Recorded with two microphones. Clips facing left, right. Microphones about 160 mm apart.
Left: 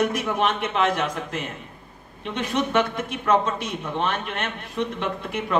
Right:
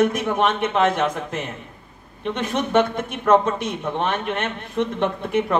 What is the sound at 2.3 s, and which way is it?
A man's voice, 50° right (ahead or behind).